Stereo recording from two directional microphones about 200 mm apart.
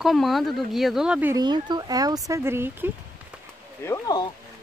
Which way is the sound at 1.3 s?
20° right (ahead or behind).